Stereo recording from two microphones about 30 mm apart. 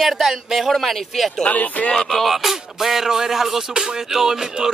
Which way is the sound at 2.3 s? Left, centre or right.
Centre.